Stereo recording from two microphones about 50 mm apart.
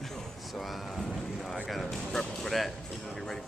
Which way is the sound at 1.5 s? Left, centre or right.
Centre.